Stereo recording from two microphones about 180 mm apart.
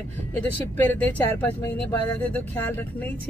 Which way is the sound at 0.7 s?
10° left (ahead or behind).